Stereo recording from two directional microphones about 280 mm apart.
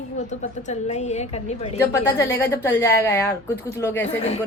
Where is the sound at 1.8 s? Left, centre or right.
Centre.